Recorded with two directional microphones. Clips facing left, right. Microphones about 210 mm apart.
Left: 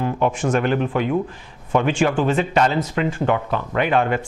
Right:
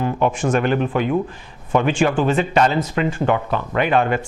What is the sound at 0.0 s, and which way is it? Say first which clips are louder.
Speech: right 1 dB; 10° right (ahead or behind).